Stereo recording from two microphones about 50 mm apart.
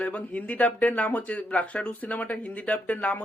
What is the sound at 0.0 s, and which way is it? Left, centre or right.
Speech, left.